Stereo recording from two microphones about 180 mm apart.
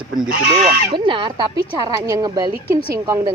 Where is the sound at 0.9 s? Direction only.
25° right (ahead or behind).